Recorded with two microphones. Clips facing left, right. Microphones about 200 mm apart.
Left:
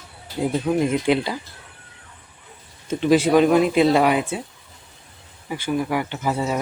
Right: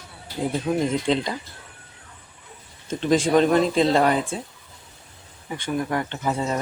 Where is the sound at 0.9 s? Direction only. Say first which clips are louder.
Left 3 dB; 10° left (ahead or behind).